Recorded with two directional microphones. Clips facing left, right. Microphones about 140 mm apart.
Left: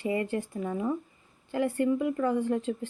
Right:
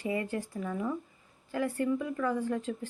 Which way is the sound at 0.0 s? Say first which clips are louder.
Left 3 dB; 25° left (ahead or behind).